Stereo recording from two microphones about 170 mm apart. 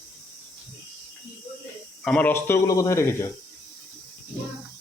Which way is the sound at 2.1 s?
10° left (ahead or behind).